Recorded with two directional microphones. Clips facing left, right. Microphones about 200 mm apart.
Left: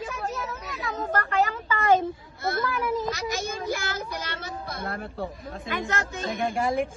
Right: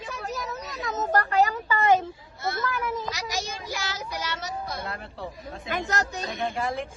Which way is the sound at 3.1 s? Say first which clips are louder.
Left 3 dB; 55° left (ahead or behind).